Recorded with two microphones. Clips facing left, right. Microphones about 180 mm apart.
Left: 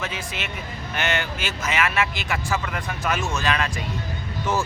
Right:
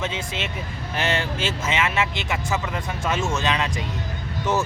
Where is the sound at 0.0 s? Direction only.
25° right (ahead or behind).